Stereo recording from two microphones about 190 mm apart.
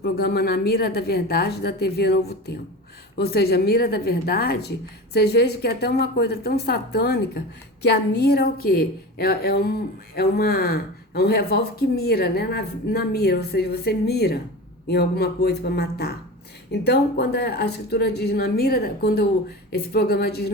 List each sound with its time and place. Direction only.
0.0 s a woman's voice: 55° left (ahead or behind)